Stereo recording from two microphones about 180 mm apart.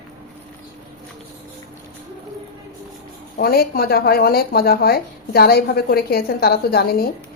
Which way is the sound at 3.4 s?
60° left (ahead or behind).